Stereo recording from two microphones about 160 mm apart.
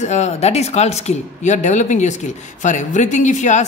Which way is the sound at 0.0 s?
45° left (ahead or behind).